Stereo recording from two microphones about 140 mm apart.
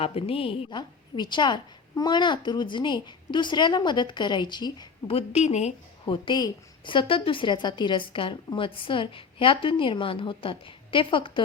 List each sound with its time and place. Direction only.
0.0 s a woman's voice: 45° left (ahead or behind)
5.1 s a woman's voice: 50° left (ahead or behind)
6.1 s a woman's voice: 35° left (ahead or behind)